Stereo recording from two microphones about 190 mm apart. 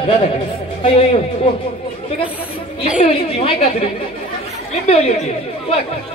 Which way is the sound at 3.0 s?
30° left (ahead or behind).